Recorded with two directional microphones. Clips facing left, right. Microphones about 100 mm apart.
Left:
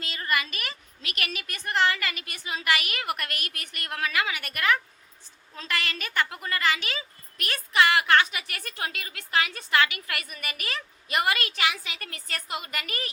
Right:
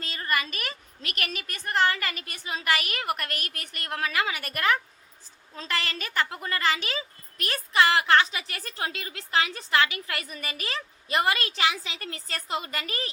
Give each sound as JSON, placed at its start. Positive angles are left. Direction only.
{"t": 0.0, "sound": "a woman's voice", "side_deg": -40}